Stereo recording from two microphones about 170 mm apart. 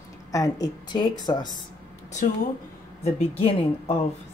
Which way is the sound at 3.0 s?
35° left (ahead or behind).